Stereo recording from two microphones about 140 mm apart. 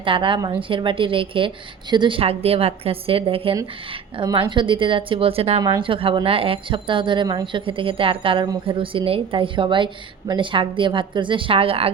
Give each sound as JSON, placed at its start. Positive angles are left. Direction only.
{"t": 0.0, "sound": "speech", "side_deg": -40}
{"t": 5.6, "sound": "speech", "side_deg": -35}